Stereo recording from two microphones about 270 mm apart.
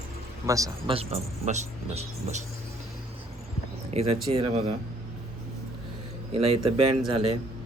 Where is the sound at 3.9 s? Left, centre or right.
Right.